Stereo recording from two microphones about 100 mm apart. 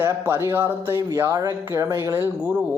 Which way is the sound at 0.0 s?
25° right (ahead or behind).